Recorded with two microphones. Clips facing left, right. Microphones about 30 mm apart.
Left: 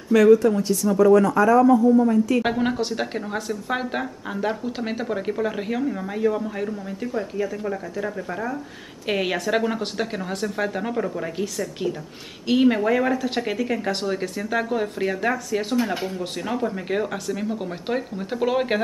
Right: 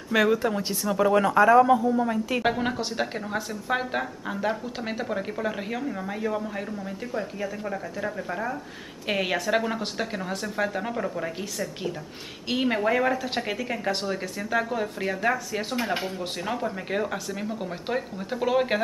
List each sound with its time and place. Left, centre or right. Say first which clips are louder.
0.1 s speech: left 7 dB; right
2.4 s speech: left 3 dB; centre